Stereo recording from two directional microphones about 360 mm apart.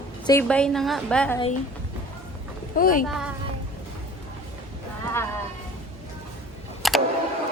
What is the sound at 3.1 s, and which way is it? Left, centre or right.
Speech, centre.